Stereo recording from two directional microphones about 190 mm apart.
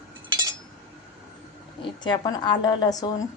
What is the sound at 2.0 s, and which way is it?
A woman's voice, 25° left (ahead or behind).